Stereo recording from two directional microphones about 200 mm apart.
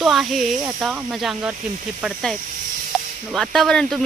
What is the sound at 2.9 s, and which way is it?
Snake, 5° right (ahead or behind).